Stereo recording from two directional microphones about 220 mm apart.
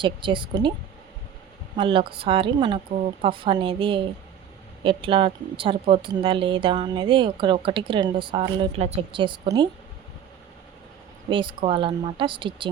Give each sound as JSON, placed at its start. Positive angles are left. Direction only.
{"t": 0.0, "sound": "a woman's voice", "side_deg": -20}
{"t": 1.7, "sound": "a woman's voice", "side_deg": -25}
{"t": 11.3, "sound": "a woman's voice", "side_deg": -20}